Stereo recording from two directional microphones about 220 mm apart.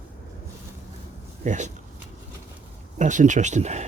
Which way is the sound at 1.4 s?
35° right (ahead or behind).